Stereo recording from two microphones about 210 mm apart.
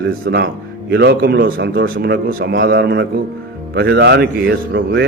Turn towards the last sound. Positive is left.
turn(degrees=-50)  # may be behind; listen again after turning